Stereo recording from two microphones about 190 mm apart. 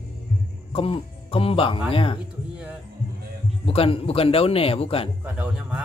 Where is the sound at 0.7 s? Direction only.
30° left (ahead or behind).